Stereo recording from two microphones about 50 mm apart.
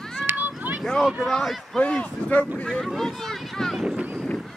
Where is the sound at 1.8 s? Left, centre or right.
Left.